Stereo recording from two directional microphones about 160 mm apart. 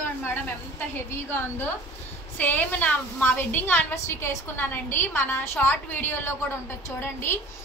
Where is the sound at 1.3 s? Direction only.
10° left (ahead or behind).